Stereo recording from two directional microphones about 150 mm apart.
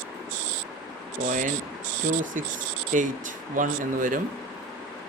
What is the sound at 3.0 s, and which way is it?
Speech, 60° right (ahead or behind).